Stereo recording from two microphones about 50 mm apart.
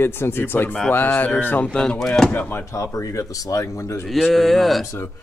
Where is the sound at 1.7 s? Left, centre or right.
Centre.